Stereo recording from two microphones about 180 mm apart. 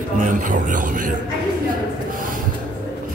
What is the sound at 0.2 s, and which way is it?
Speech, 45° right (ahead or behind).